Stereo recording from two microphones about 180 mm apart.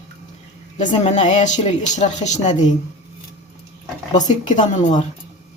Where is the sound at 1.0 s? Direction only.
40° left (ahead or behind).